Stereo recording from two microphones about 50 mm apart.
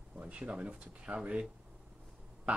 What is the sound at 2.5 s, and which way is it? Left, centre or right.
Speech, right.